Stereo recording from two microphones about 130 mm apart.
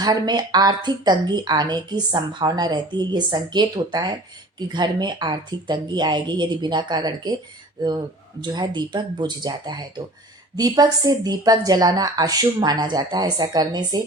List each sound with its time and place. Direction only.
0.0 s speech: 30° right (ahead or behind)